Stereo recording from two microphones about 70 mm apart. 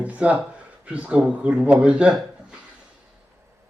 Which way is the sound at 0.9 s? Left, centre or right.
Centre.